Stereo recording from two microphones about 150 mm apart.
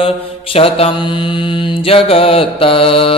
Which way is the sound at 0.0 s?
40° left (ahead or behind).